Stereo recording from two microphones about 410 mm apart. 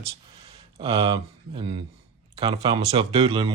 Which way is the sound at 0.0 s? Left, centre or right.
Centre.